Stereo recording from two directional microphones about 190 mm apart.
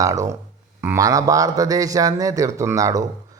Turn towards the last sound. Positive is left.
turn(degrees=-20)  # may be behind; listen again after turning